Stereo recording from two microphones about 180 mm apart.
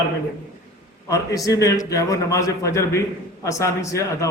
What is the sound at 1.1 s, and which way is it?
A man's voice, 20° left (ahead or behind).